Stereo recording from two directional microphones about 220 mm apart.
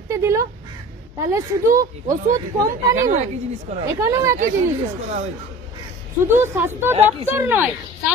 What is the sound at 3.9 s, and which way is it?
Speech, 15° right (ahead or behind).